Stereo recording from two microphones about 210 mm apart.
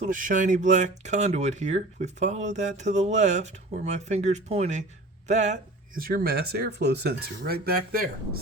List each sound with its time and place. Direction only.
0.0 s speech: 40° right (ahead or behind)